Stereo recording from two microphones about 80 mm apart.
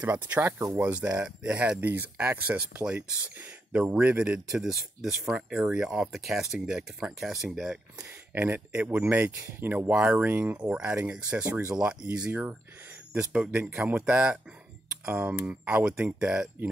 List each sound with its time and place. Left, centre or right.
0.0 s speech: centre
0.4 s speech: right
0.9 s speech: centre
2.8 s speech: centre
4.5 s speech: centre
8.4 s speech: right
13.3 s speech: centre